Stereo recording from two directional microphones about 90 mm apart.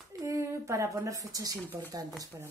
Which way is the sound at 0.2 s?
35° right (ahead or behind).